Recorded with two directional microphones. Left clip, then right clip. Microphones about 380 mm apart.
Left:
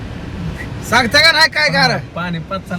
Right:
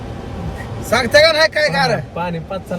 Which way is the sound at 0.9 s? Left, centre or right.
Centre.